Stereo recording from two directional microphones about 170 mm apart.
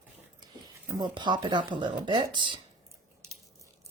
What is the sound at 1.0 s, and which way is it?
Speech, 25° right (ahead or behind).